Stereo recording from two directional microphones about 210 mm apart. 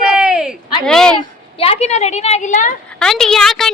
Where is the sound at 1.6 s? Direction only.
30° left (ahead or behind).